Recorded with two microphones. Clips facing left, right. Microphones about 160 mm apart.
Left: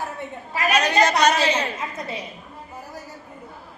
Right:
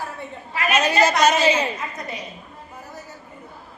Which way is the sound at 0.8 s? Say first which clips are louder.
Right 1 dB; 5° right (ahead or behind).